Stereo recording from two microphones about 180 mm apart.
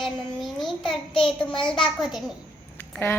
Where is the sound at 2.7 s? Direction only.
10° left (ahead or behind).